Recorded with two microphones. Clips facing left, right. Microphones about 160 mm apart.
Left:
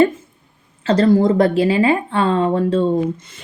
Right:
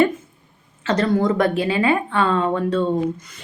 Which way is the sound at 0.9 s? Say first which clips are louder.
Left 5 dB; 30° left (ahead or behind).